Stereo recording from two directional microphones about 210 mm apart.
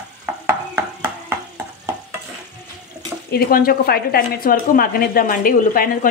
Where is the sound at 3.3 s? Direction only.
45° left (ahead or behind).